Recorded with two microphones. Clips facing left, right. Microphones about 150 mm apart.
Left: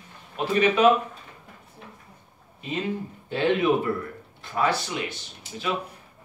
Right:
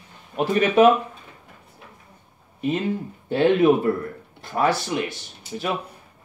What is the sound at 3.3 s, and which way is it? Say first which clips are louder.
Speech: right 5 dB; 45° right (ahead or behind).